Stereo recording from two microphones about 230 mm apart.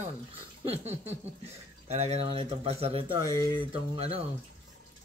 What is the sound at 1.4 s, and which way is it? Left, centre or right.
Speech, right.